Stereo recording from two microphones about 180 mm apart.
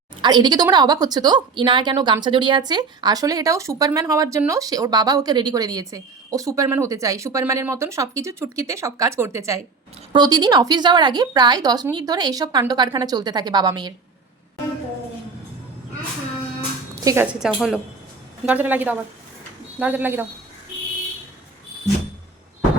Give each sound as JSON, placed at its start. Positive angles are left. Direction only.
{"t": 0.2, "sound": "speech", "side_deg": -25}
{"t": 16.9, "sound": "music", "side_deg": -20}
{"t": 17.4, "sound": "speech", "side_deg": -5}